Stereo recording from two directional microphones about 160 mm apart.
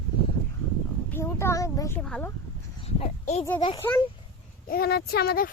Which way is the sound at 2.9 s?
45° left (ahead or behind).